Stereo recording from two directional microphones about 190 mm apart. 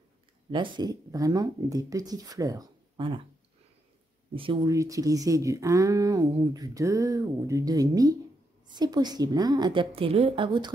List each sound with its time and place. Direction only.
0.5 s speech: 25° right (ahead or behind)
4.4 s speech: 25° right (ahead or behind)